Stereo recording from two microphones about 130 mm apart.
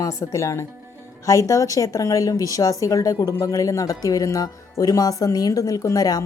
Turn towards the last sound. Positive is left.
turn(degrees=30)  # may be behind; listen again after turning